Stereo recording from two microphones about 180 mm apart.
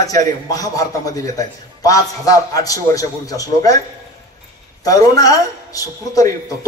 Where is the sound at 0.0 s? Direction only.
20° left (ahead or behind).